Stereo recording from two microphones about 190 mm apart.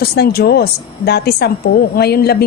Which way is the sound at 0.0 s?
55° left (ahead or behind).